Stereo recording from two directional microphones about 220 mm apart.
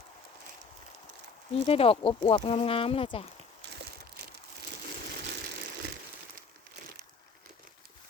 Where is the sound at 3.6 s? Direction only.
55° right (ahead or behind).